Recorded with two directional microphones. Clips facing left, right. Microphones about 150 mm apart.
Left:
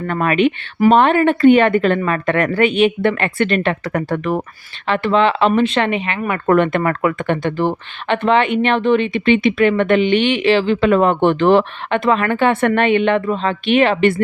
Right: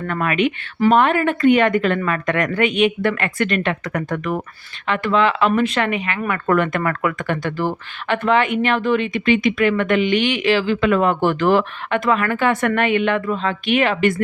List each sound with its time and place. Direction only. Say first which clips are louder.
0.1 s speech: left 4 dB; 30° left (ahead or behind)